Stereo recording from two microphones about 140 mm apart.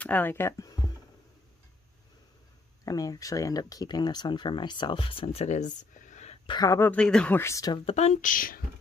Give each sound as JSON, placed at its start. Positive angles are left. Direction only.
{"t": 0.0, "sound": "speech", "side_deg": 10}
{"t": 2.8, "sound": "speech", "side_deg": 25}
{"t": 6.4, "sound": "speech", "side_deg": 35}
{"t": 6.7, "sound": "speech", "side_deg": 15}
{"t": 7.7, "sound": "speech", "side_deg": 45}